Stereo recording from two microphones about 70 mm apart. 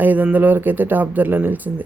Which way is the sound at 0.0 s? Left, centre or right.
Right.